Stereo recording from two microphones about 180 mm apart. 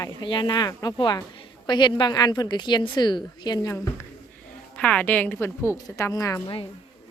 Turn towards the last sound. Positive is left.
turn(degrees=20)  # may be behind; listen again after turning